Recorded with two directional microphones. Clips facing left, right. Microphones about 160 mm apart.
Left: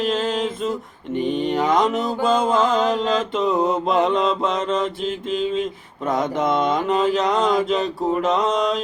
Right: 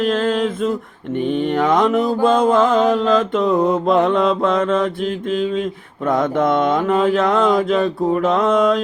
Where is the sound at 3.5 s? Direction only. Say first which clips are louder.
Right 4 dB; 25° left (ahead or behind).